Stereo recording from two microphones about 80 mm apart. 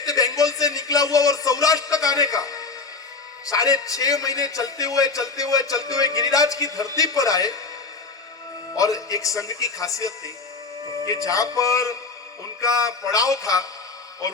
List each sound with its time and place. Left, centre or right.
0.0 s a sound: left
3.5 s a man's voice: left
8.7 s a man's voice: left
10.8 s music: right
11.1 s a man's voice: left